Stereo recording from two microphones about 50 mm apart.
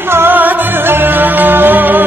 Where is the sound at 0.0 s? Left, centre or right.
Right.